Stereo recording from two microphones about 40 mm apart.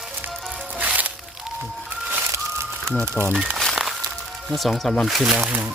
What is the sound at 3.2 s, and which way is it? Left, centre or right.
Speech, left.